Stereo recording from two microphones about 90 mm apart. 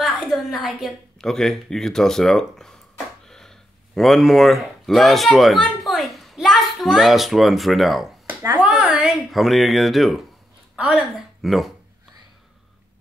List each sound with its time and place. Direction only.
0.0 s a woman's voice: centre (ahead or behind)
8.3 s speech: 20° right (ahead or behind)
8.6 s a woman's voice: 10° right (ahead or behind)
9.3 s speech: centre (ahead or behind)
10.8 s a woman's voice: 10° right (ahead or behind)